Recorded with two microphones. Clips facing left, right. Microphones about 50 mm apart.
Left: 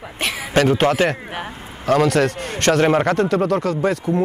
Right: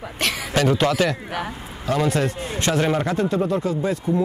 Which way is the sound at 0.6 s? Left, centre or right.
Left.